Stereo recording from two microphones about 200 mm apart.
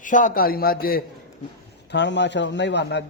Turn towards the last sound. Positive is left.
turn(degrees=60)  # may be behind; listen again after turning